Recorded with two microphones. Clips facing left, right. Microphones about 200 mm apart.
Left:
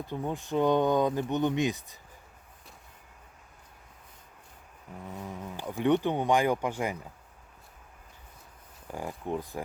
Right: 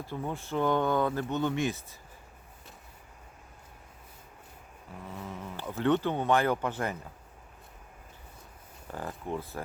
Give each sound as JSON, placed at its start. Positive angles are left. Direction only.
{"t": 0.0, "sound": "speech", "side_deg": 20}
{"t": 5.1, "sound": "speech", "side_deg": 15}
{"t": 8.9, "sound": "speech", "side_deg": 15}